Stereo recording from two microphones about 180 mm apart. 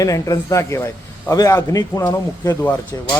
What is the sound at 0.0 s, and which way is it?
A man's voice, 20° left (ahead or behind).